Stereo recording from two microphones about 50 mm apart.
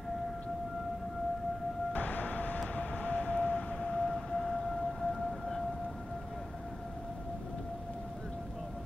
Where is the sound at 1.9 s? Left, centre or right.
Left.